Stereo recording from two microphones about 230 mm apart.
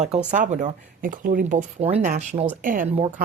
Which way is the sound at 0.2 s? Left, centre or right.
Right.